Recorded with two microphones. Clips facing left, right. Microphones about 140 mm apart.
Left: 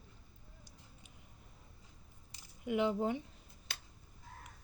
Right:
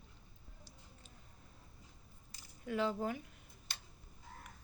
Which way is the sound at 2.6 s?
20° left (ahead or behind).